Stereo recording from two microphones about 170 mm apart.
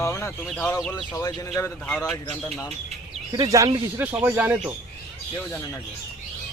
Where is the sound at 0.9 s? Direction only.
20° left (ahead or behind).